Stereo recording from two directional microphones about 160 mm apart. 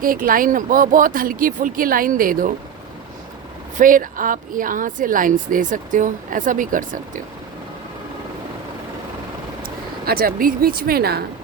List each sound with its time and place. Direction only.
0.0 s speech: 60° right (ahead or behind)
3.8 s speech: 55° right (ahead or behind)
10.1 s speech: 65° right (ahead or behind)